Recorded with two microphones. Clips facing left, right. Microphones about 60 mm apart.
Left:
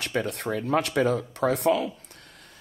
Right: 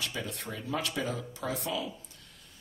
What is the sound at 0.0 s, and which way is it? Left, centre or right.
Speech, left.